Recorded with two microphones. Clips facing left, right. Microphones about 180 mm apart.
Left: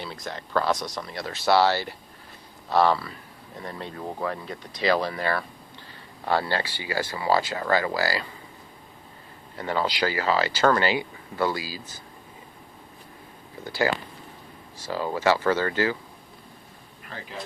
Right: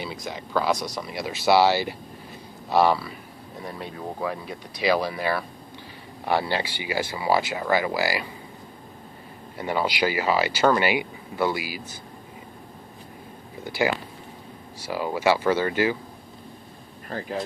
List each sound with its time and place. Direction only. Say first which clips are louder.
0.0 s speech: right 2 dB; 5° right (ahead or behind)
9.6 s speech: right 1 dB; 15° right (ahead or behind)
13.7 s speech: right 1 dB; 15° right (ahead or behind)
17.1 s speech: right 8 dB; 45° right (ahead or behind)